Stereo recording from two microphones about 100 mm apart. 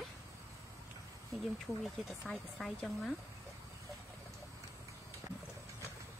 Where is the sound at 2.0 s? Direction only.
5° left (ahead or behind).